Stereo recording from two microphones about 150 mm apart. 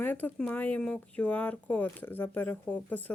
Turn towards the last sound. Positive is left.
turn(degrees=10)  # may be behind; listen again after turning